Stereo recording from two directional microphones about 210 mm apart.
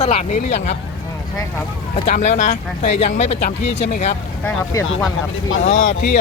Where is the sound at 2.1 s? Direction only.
35° left (ahead or behind).